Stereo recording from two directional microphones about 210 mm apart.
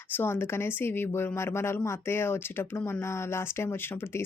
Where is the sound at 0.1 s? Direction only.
10° left (ahead or behind).